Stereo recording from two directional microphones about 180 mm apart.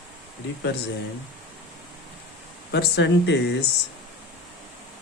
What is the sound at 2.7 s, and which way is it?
Speech, 70° left (ahead or behind).